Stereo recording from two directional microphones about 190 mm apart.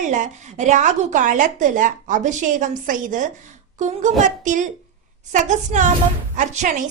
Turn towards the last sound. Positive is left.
turn(degrees=-40)  # may be behind; listen again after turning